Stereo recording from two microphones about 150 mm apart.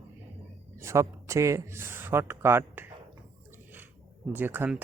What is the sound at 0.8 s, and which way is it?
Speech, 20° right (ahead or behind).